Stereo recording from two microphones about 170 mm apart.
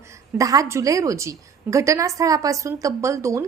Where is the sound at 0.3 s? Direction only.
20° right (ahead or behind).